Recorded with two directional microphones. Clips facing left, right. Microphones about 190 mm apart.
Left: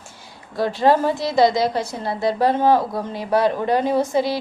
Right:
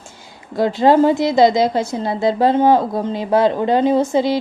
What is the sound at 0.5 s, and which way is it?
A woman's voice, 20° right (ahead or behind).